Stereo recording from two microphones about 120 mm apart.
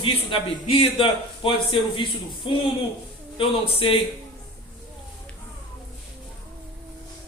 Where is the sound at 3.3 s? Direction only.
50° left (ahead or behind).